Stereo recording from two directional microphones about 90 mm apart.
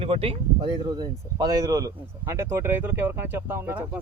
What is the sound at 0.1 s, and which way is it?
Speech, 90° right.